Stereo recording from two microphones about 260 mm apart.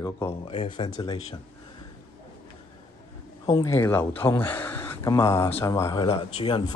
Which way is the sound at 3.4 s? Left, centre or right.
Centre.